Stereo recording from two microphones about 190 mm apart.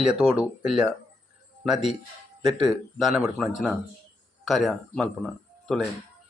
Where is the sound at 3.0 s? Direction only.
Centre (ahead or behind).